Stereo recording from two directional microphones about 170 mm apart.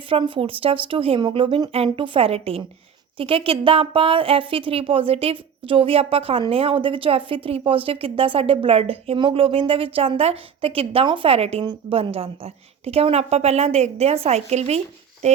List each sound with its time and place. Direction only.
0.1 s a woman's voice: 30° right (ahead or behind)